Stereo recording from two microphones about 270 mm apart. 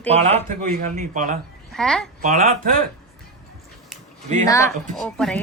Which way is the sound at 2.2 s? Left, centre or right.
Right.